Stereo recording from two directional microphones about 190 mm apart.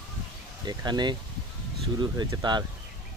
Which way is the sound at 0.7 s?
20° right (ahead or behind).